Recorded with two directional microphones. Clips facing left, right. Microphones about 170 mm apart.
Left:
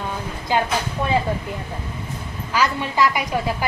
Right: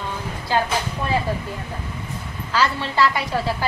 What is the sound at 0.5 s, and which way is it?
Speech, 15° left (ahead or behind).